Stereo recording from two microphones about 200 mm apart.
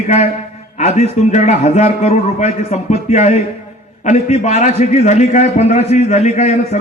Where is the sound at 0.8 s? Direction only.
35° left (ahead or behind).